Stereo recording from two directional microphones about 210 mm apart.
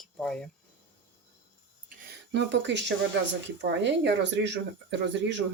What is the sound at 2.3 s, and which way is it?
Speech, 55° right (ahead or behind).